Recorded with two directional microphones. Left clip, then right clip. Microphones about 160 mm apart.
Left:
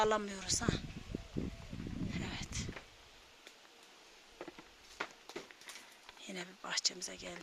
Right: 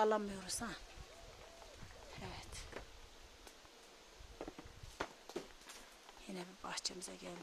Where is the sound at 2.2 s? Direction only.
10° left (ahead or behind).